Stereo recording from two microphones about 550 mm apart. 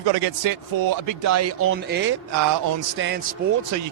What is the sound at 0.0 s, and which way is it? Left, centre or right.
A man's voice, right.